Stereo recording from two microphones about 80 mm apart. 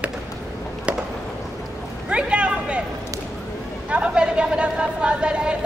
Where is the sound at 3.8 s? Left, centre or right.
Centre.